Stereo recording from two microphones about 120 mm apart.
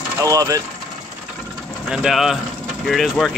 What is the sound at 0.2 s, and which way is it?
Speech, 30° right (ahead or behind).